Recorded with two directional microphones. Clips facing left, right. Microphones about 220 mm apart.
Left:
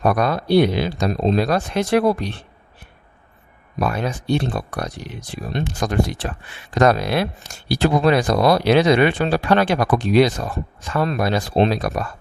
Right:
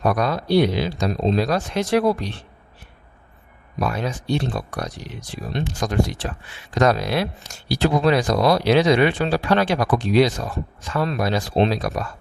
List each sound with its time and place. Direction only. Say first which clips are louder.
0.0 s speech: left 2 dB; 55° left (ahead or behind)
3.8 s speech: left 2 dB; 55° left (ahead or behind)